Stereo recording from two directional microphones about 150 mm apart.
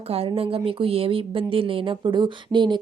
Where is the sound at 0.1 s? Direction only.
40° right (ahead or behind).